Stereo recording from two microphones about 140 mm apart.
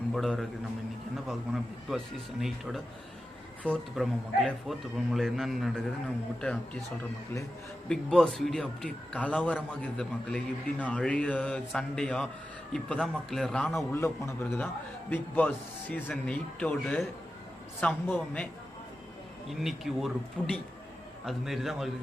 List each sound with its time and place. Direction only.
0.1 s a man's voice: centre (ahead or behind)
1.9 s a man's voice: centre (ahead or behind)
3.9 s a man's voice: centre (ahead or behind)
7.9 s a man's voice: 5° left (ahead or behind)
13.9 s a man's voice: 20° left (ahead or behind)
19.5 s a man's voice: centre (ahead or behind)